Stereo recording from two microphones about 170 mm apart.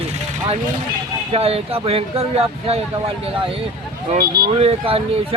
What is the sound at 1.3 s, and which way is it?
Speech, 35° right (ahead or behind).